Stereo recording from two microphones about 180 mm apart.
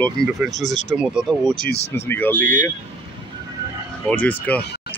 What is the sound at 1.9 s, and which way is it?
Speech, 10° left (ahead or behind).